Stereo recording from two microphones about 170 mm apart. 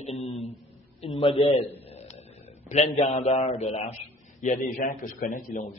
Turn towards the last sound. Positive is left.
turn(degrees=50)  # may be behind; listen again after turning